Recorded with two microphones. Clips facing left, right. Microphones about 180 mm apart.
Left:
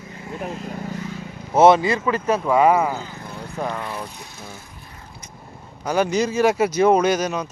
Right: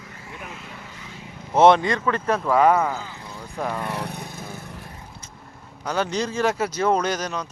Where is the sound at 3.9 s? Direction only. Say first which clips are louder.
Right 2 dB; 70° right (ahead or behind).